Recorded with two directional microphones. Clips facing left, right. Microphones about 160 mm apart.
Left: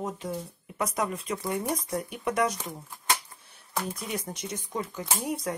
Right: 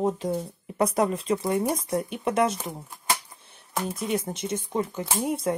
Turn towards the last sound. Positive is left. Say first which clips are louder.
# right 5 dB
turn(degrees=-25)  # may be behind; listen again after turning